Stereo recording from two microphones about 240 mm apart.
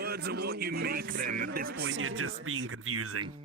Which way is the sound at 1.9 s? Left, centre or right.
Right.